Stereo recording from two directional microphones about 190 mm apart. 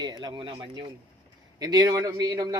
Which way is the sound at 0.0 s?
20° right (ahead or behind).